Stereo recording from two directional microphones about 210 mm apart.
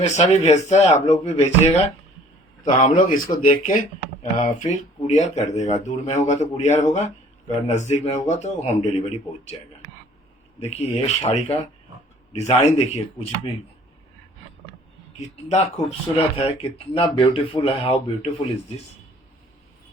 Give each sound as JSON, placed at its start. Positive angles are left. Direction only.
{"t": 0.0, "sound": "a man's voice", "side_deg": 30}
{"t": 10.6, "sound": "a man's voice", "side_deg": 30}
{"t": 15.2, "sound": "speech", "side_deg": 30}